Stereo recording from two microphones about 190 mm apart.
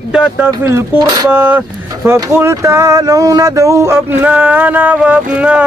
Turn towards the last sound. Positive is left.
turn(degrees=-5)  # may be behind; listen again after turning